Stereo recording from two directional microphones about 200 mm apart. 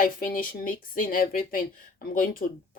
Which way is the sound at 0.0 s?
45° left (ahead or behind).